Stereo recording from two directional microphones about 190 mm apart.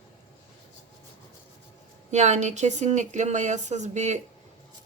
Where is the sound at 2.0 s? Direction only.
35° right (ahead or behind).